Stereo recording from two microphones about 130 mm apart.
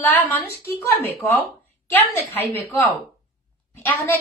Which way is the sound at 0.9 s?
15° left (ahead or behind).